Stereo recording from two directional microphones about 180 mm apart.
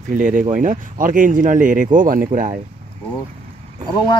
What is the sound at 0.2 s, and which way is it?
Speech, 50° right (ahead or behind).